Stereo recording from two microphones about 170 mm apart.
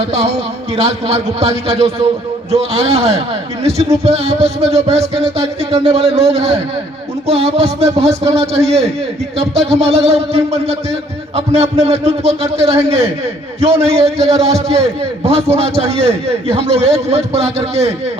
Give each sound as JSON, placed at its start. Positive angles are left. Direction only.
{"t": 0.1, "sound": "a man's voice", "side_deg": -40}